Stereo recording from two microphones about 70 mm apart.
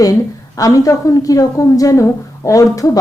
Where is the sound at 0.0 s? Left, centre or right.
Left.